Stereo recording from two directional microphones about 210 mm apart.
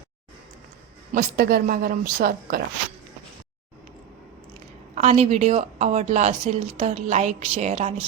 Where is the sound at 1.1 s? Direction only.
45° right (ahead or behind).